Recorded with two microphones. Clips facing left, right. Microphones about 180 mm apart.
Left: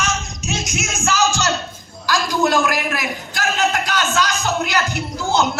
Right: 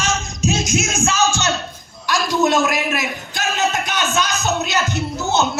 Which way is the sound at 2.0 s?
20° right (ahead or behind).